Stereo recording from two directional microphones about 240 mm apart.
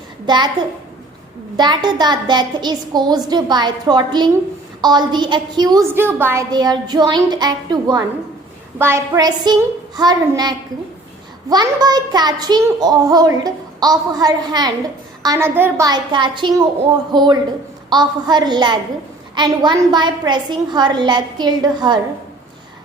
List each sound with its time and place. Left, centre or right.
0.3 s a woman's voice: centre
1.5 s a woman's voice: centre